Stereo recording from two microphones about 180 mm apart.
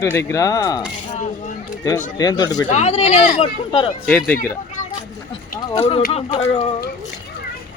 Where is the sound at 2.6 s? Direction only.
40° left (ahead or behind).